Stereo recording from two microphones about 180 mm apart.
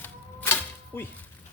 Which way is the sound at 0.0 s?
10° left (ahead or behind).